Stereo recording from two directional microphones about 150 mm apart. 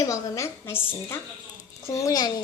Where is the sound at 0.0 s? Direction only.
20° left (ahead or behind).